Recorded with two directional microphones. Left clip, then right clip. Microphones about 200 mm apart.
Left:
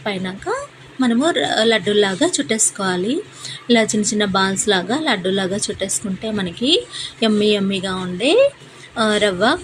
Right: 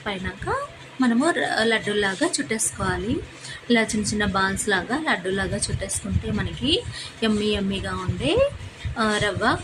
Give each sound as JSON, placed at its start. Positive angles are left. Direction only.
{"t": 0.0, "sound": "a woman's voice", "side_deg": 20}